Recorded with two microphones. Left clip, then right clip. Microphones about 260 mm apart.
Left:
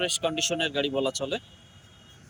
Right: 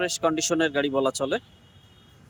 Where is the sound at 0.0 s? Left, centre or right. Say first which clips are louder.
Right 2 dB; centre.